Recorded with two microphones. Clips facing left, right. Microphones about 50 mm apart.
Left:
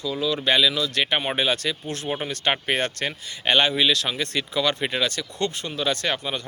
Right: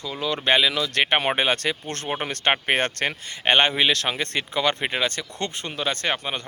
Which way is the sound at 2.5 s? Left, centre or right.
Right.